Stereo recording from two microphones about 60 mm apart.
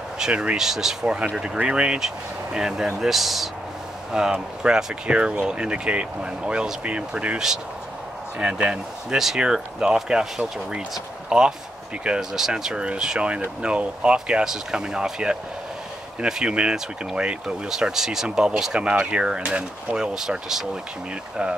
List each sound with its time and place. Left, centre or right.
0.2 s speech: centre
4.1 s speech: centre